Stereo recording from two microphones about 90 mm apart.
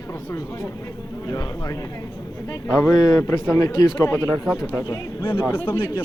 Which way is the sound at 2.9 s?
45° left (ahead or behind).